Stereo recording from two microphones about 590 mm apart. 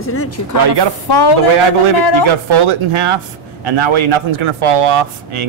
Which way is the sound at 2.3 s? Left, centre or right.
Right.